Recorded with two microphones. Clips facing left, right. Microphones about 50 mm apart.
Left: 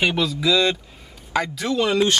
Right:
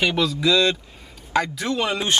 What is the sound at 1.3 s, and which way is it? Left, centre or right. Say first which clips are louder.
Speech: right 1 dB; centre.